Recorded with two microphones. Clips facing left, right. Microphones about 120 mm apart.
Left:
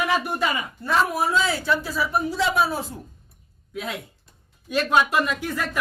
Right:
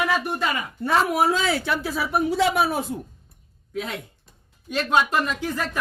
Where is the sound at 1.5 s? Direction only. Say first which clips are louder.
Even; 65° right (ahead or behind).